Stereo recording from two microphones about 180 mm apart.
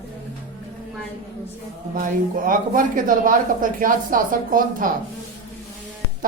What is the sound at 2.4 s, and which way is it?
Speech, 50° right (ahead or behind).